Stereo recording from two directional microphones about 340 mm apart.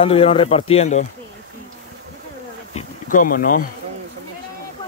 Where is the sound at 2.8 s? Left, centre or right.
Left.